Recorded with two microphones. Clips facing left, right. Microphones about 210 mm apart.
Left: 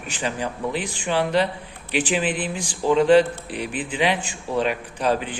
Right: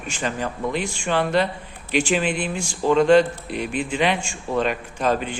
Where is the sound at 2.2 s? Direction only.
10° right (ahead or behind).